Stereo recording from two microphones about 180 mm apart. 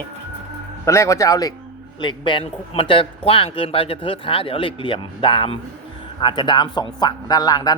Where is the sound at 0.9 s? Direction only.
15° left (ahead or behind).